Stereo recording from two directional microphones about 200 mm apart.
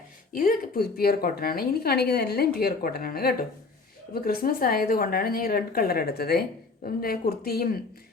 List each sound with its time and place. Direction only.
0.3 s speech: 45° left (ahead or behind)